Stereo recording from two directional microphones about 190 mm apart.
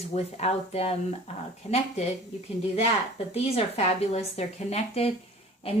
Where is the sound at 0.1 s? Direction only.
35° left (ahead or behind).